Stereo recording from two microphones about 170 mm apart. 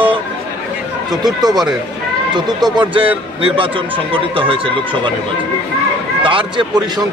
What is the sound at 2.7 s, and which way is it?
Speech, 30° right (ahead or behind).